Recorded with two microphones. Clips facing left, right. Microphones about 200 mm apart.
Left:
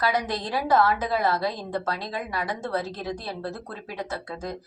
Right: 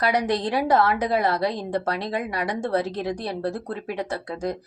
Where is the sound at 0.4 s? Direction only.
25° right (ahead or behind).